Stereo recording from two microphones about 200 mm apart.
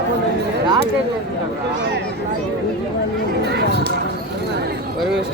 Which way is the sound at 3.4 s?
55° right (ahead or behind).